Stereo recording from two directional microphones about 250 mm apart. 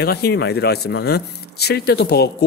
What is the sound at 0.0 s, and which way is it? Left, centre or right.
Speech, left.